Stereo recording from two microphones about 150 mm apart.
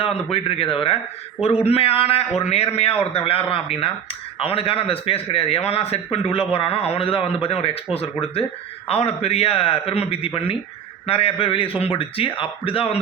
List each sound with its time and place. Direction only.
0.0 s speech: 40° left (ahead or behind)